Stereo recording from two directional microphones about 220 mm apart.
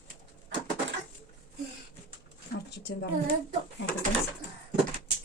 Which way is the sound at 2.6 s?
50° left (ahead or behind).